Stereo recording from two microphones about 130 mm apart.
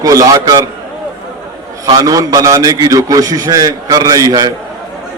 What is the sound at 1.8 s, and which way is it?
A man's voice, 30° right (ahead or behind).